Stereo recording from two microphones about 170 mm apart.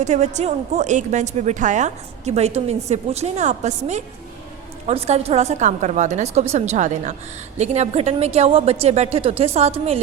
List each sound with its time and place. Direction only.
0.0 s a woman's voice: 45° right (ahead or behind)